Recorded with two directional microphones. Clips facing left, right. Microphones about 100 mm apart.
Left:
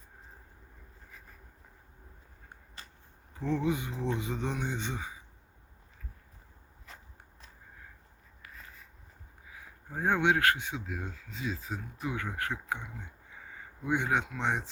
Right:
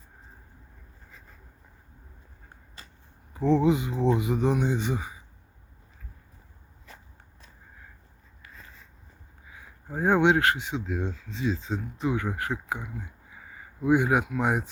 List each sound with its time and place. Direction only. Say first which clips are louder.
3.4 s speech: right 8 dB; 20° right (ahead or behind)
9.5 s speech: right 6 dB; 20° right (ahead or behind)